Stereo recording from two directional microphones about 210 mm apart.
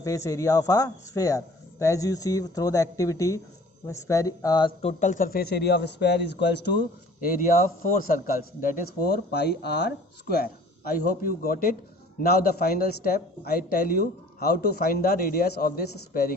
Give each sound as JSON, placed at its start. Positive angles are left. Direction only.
{"t": 0.0, "sound": "a man's voice", "side_deg": 15}
{"t": 7.2, "sound": "speech", "side_deg": 45}
{"t": 11.2, "sound": "speech", "side_deg": 45}